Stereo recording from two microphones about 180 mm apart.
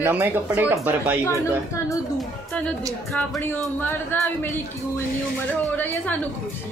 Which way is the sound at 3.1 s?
10° left (ahead or behind).